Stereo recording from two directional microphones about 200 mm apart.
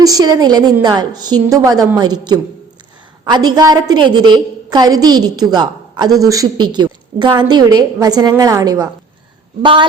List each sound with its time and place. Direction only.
0.0 s a woman's voice: 20° right (ahead or behind)